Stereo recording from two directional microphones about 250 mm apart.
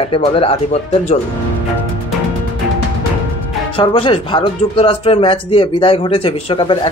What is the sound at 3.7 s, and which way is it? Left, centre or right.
Speech, left.